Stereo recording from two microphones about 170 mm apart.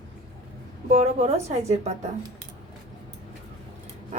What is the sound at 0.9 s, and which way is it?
Speech, 40° right (ahead or behind).